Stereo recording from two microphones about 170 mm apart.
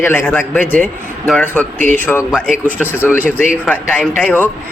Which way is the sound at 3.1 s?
10° left (ahead or behind).